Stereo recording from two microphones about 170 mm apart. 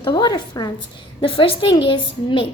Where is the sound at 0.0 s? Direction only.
25° left (ahead or behind).